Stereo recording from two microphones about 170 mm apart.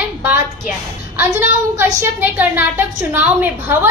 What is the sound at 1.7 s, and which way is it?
A woman's voice, 10° right (ahead or behind).